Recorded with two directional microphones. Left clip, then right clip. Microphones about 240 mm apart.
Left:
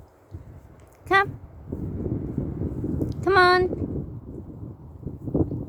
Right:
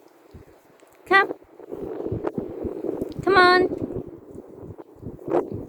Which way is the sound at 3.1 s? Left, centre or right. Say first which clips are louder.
Right 2 dB; centre.